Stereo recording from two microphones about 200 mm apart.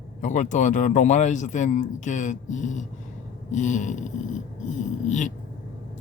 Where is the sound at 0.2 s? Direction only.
40° left (ahead or behind).